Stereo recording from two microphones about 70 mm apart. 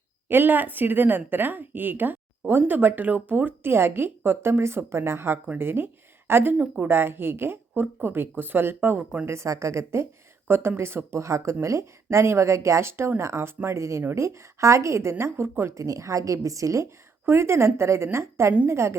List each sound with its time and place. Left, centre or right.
0.3 s speech: right
9.2 s a woman's voice: right
15.8 s a woman's voice: right
17.2 s speech: right